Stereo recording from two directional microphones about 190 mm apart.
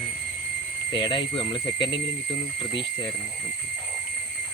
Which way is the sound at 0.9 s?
25° left (ahead or behind).